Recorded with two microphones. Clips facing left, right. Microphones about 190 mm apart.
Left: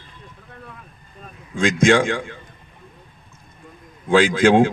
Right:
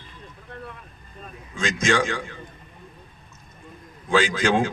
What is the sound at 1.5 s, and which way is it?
Speech, 55° left (ahead or behind).